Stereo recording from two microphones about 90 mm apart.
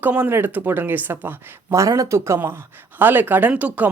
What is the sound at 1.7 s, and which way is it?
Speech, 35° right (ahead or behind).